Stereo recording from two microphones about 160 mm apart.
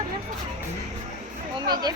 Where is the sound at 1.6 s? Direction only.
25° right (ahead or behind).